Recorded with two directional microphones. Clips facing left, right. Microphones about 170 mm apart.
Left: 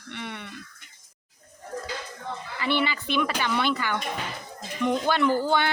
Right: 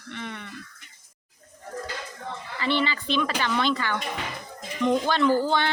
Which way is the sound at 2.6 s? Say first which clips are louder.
Right 1 dB; 10° left (ahead or behind).